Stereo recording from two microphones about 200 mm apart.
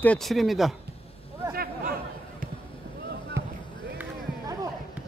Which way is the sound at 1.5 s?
45° right (ahead or behind).